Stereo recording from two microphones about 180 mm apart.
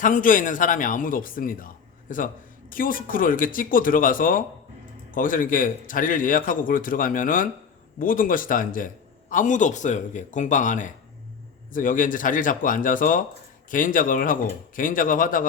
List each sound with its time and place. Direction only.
0.0 s speech: 50° left (ahead or behind)